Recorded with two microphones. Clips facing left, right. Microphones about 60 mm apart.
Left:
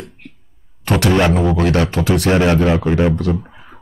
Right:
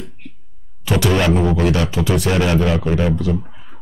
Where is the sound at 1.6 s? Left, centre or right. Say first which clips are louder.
Left 2 dB; left.